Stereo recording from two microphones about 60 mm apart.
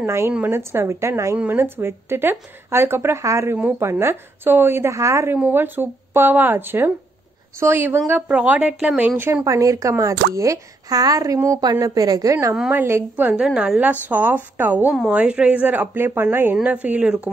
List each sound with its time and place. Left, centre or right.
0.0 s a woman's voice: right
1.6 s a woman's voice: right
3.9 s speech: right
4.9 s a woman's voice: right
5.4 s speech: right
8.3 s speech: right
9.4 s a woman's voice: right
12.7 s a woman's voice: right
13.1 s speech: right
13.4 s a woman's voice: centre
13.7 s speech: right
15.0 s speech: centre; by 16.5 s right
16.6 s speech: right